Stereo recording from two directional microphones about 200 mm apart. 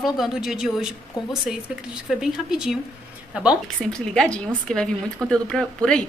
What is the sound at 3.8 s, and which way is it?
A woman's voice, 5° left (ahead or behind).